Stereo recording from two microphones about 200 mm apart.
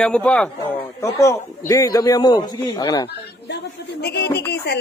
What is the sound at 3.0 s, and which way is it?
Speech, 55° left (ahead or behind).